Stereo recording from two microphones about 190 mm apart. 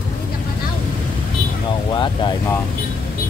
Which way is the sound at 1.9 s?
25° left (ahead or behind).